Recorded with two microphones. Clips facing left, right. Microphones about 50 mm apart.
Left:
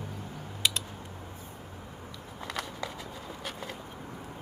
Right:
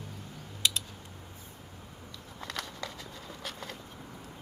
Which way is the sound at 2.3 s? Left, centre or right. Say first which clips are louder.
Left 3 dB; centre.